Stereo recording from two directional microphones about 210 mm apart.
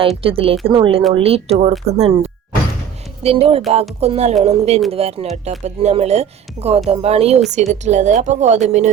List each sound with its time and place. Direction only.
0.2 s speech: 25° right (ahead or behind)